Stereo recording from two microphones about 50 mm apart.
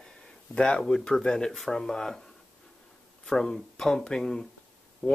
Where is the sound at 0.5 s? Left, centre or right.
Centre.